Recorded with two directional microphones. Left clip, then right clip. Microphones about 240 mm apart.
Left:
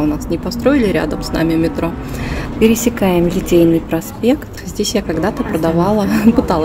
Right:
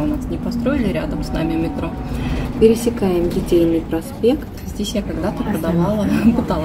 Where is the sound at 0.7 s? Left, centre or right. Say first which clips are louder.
Left 8 dB; left.